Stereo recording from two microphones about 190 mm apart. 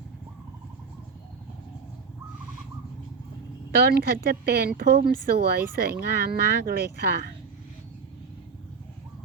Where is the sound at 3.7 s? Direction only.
55° right (ahead or behind).